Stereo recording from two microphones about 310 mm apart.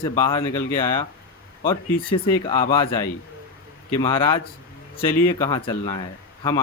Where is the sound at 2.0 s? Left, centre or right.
Centre.